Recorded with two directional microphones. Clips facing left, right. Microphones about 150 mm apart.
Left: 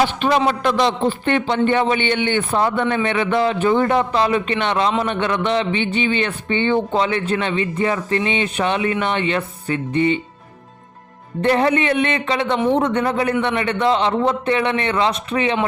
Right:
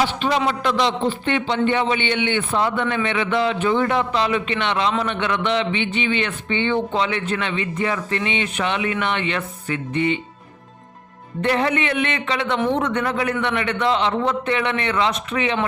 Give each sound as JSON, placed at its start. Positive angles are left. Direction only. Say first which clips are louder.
{"t": 0.0, "sound": "a man's voice", "louder": "left 3 dB", "side_deg": 55}
{"t": 11.4, "sound": "a man's voice", "louder": "left 4 dB", "side_deg": 35}